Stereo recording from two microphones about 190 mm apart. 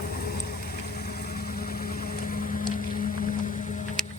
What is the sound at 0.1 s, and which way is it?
Vehicle, 50° left (ahead or behind).